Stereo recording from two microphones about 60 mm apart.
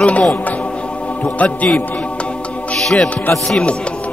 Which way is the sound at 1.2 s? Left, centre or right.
Left.